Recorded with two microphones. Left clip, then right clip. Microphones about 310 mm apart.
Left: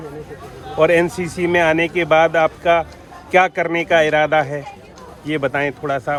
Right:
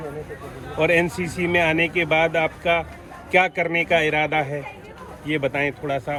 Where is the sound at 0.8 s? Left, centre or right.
Left.